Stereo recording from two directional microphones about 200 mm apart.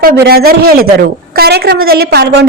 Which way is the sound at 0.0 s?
50° right (ahead or behind).